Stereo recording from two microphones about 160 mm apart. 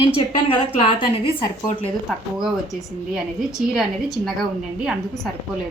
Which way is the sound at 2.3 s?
Centre (ahead or behind).